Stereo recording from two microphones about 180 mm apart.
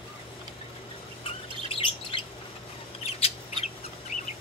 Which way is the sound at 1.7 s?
30° left (ahead or behind).